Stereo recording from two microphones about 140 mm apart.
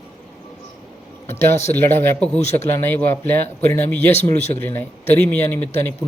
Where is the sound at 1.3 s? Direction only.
20° left (ahead or behind).